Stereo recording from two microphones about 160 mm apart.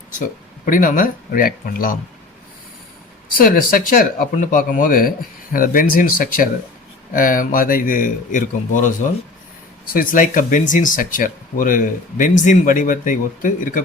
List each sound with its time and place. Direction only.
0.2 s speech: 60° left (ahead or behind)
3.3 s speech: 60° left (ahead or behind)